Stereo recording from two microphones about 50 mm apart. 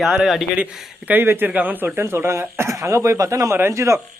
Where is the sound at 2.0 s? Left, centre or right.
Right.